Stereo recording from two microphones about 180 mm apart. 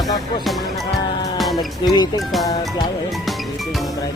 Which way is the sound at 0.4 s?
Centre (ahead or behind).